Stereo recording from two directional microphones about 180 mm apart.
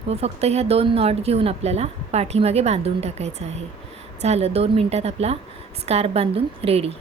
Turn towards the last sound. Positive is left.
turn(degrees=-35)  # may be behind; listen again after turning